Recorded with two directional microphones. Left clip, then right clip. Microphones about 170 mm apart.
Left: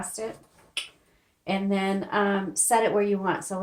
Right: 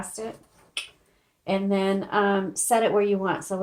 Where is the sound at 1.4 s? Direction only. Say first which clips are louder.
Right 3 dB; 35° right (ahead or behind).